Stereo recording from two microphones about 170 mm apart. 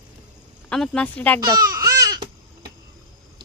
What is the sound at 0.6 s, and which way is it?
Speech, 5° left (ahead or behind).